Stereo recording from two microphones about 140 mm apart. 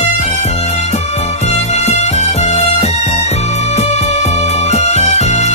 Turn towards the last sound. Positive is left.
turn(degrees=55)  # may be behind; listen again after turning